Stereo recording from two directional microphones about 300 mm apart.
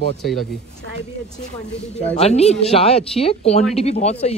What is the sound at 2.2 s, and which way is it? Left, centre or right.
Speech, left.